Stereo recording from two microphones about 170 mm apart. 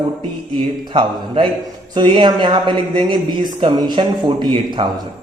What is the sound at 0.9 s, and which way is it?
Speech, 30° right (ahead or behind).